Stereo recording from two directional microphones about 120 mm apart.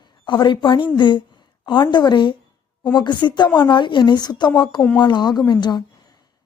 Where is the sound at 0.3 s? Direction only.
40° left (ahead or behind).